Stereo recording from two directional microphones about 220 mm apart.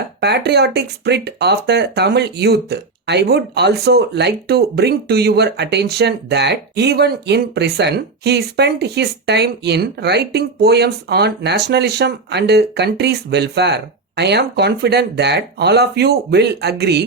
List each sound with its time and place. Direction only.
0.2 s speech: 50° right (ahead or behind)